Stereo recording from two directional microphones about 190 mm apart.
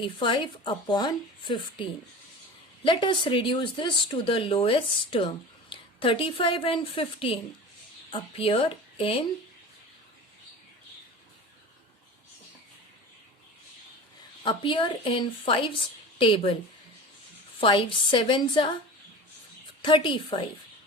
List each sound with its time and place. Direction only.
0.0 s speech: 25° left (ahead or behind)
14.4 s speech: 25° left (ahead or behind)
17.6 s speech: 25° left (ahead or behind)
19.8 s speech: 25° left (ahead or behind)